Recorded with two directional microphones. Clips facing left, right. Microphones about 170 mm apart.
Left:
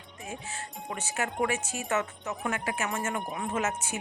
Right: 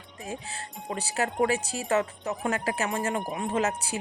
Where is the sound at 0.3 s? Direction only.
35° right (ahead or behind).